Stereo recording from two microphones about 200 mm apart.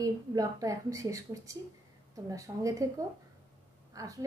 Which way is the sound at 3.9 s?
15° right (ahead or behind).